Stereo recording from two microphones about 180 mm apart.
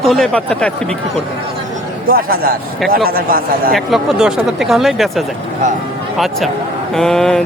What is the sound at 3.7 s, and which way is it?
Speech, centre (ahead or behind).